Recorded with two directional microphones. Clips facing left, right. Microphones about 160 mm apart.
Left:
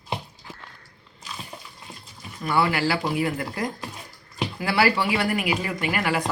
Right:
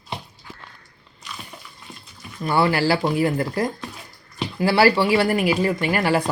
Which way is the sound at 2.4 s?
35° right (ahead or behind).